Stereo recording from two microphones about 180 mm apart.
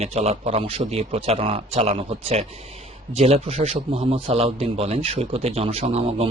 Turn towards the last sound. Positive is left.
turn(degrees=-35)  # may be behind; listen again after turning